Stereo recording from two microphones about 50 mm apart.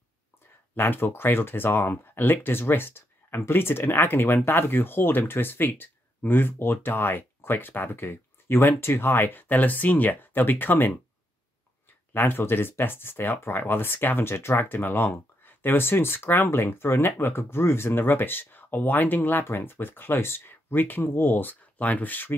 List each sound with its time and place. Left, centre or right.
0.7 s speech: left
12.1 s speech: left